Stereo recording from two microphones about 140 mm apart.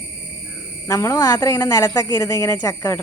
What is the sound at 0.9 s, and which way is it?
A woman's voice, 20° left (ahead or behind).